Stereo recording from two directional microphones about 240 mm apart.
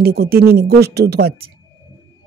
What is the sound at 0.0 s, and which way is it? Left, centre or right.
Speech, right.